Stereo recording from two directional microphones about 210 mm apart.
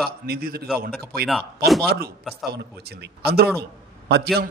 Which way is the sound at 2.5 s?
50° right (ahead or behind).